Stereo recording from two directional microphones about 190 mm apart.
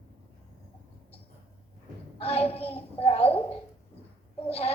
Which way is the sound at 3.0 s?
30° left (ahead or behind).